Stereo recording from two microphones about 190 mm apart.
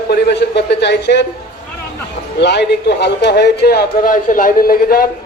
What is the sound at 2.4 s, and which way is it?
A man's voice, 65° left (ahead or behind).